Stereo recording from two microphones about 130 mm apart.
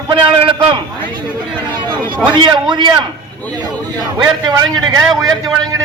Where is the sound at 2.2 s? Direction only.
35° right (ahead or behind).